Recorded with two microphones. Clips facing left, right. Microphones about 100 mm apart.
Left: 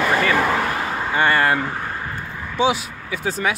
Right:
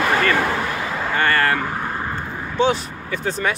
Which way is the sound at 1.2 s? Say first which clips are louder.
Left 1 dB; 15° left (ahead or behind).